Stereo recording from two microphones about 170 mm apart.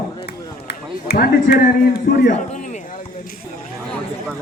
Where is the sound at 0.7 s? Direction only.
60° left (ahead or behind).